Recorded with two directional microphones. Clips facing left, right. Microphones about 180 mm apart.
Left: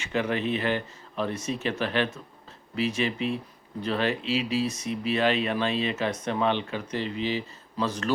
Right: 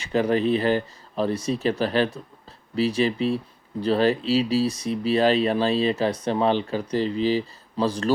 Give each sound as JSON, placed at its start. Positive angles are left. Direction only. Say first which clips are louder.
{"t": 0.0, "sound": "speech", "louder": "right 6 dB", "side_deg": -35}